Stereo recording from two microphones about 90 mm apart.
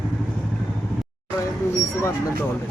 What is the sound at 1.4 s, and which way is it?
Vehicle, 30° left (ahead or behind).